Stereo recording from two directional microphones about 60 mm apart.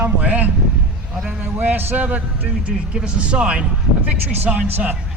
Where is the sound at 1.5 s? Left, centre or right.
Right.